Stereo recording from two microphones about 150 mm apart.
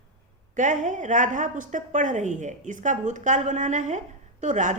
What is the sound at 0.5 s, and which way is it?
A woman's voice, 55° right (ahead or behind).